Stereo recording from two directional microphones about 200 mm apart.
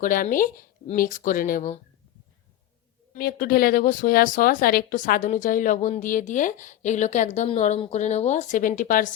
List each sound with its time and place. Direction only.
0.0 s speech: 45° left (ahead or behind)
3.2 s speech: 50° left (ahead or behind)